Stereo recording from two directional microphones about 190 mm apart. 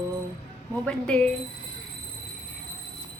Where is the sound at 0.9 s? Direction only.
5° left (ahead or behind).